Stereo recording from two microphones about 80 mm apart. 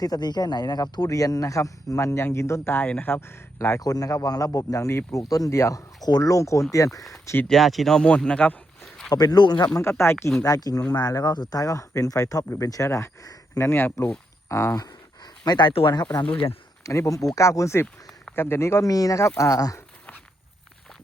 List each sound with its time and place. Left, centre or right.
0.0 s speech: left
3.8 s speech: left
4.9 s speech: left
5.3 s speech: left
5.5 s speech: left
6.0 s speech: left
7.4 s speech: centre
9.0 s speech: left
10.0 s speech: left
10.4 s speech: left
14.8 s speech: left
16.2 s speech: left
16.8 s speech: left
18.9 s speech: left